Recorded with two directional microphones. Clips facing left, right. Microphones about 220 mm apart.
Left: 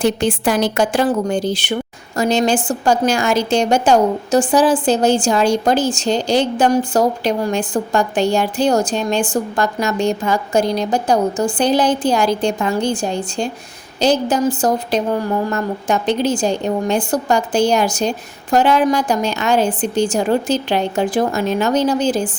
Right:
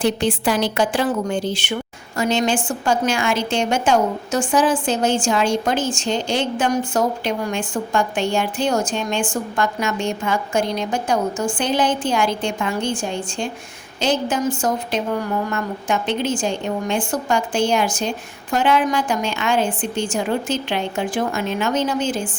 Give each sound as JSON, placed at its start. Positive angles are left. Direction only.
{"t": 0.0, "sound": "a woman's voice", "side_deg": 45}